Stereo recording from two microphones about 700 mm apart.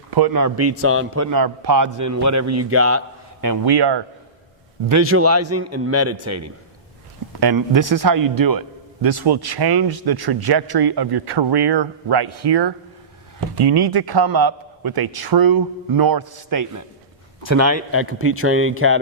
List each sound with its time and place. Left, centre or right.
0.1 s a man's voice: right
4.9 s a man's voice: right